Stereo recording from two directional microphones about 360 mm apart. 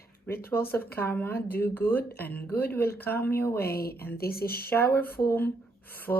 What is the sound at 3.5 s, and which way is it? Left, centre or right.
Speech, left.